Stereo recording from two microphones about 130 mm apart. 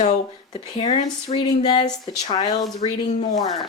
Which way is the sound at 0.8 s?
55° left (ahead or behind).